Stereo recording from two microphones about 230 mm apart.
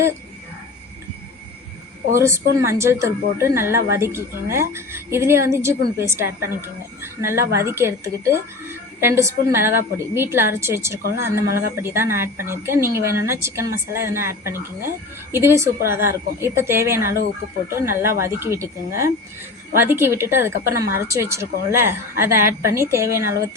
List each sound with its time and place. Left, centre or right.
2.1 s speech: centre